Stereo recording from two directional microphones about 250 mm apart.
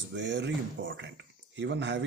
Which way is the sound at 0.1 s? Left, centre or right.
Right.